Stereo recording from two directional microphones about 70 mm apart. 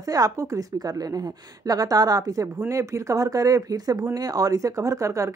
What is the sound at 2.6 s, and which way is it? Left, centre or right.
Speech, right.